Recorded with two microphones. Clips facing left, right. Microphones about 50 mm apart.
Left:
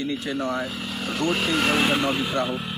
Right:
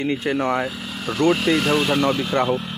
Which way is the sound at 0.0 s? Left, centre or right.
Right.